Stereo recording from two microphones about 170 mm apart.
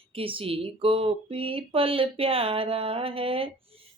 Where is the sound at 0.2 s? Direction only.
30° right (ahead or behind).